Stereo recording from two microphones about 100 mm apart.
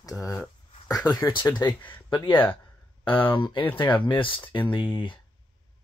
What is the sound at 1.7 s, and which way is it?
Speech, 20° left (ahead or behind).